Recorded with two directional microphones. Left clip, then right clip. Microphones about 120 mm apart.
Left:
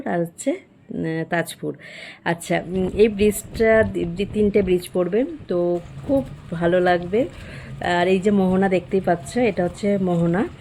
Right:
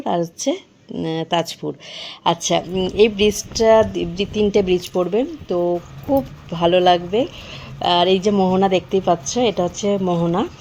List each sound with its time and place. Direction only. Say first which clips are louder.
0.0 s a woman's voice: right 3 dB; 30° right (ahead or behind)
4.8 s a woman's voice: right 2 dB; 30° right (ahead or behind)
10.0 s speech: right 2 dB; 10° right (ahead or behind)